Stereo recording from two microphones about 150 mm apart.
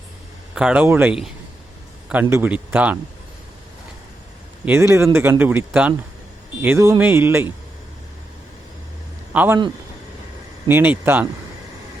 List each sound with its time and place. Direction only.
0.5 s speech: 5° right (ahead or behind)
2.3 s speech: 15° right (ahead or behind)
4.6 s speech: 15° right (ahead or behind)
9.3 s a man's voice: 10° right (ahead or behind)
10.7 s speech: 15° right (ahead or behind)